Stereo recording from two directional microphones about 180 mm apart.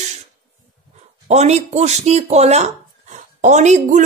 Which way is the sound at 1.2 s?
40° right (ahead or behind).